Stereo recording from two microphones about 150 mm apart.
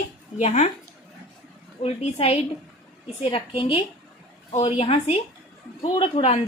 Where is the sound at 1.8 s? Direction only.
40° left (ahead or behind).